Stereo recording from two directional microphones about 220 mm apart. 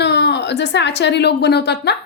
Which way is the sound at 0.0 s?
50° left (ahead or behind).